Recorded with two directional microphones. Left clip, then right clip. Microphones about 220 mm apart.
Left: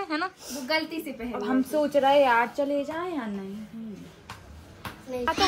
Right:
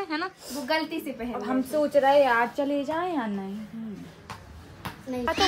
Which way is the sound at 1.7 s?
30° left (ahead or behind).